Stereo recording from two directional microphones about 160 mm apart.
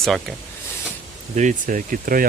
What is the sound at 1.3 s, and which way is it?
Speech, 50° right (ahead or behind).